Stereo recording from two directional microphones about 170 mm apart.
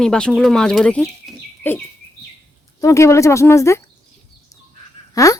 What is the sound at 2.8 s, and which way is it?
Speech, 20° left (ahead or behind).